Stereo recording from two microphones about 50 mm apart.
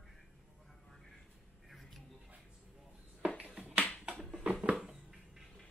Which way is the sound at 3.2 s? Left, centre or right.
Right.